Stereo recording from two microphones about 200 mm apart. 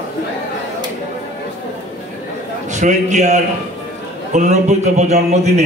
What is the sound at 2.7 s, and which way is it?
A man's voice, 35° right (ahead or behind).